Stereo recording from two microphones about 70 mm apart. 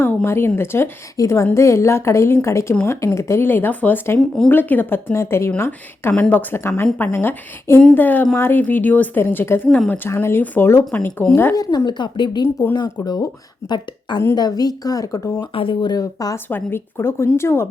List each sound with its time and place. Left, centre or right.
0.3 s speech: left
1.1 s a woman's voice: left
5.1 s speech: left
6.1 s speech: centre
6.5 s speech: left
11.5 s speech: left
11.9 s speech: left
13.7 s speech: left
14.3 s speech: left
15.4 s speech: left
16.0 s speech: left
16.5 s speech: left